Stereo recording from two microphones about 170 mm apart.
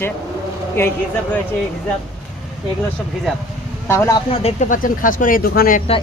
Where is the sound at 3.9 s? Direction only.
15° left (ahead or behind).